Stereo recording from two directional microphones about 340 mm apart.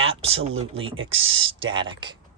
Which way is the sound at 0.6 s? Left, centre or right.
Centre.